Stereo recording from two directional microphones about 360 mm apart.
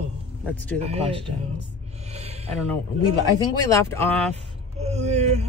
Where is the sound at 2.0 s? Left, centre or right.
Centre.